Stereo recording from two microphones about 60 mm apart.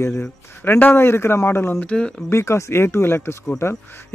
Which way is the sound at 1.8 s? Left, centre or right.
Centre.